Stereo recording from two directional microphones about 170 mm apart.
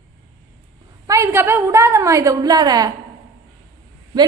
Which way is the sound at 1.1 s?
15° right (ahead or behind).